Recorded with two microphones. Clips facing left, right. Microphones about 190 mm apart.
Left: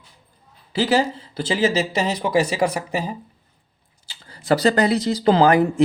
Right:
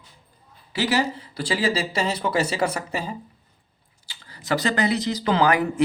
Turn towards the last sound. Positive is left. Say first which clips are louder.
# left 5 dB
turn(degrees=30)  # may be behind; listen again after turning